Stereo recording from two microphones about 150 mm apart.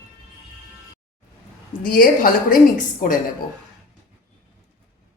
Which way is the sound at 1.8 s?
70° left (ahead or behind).